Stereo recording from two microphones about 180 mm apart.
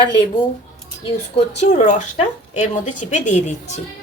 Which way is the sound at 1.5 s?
40° left (ahead or behind).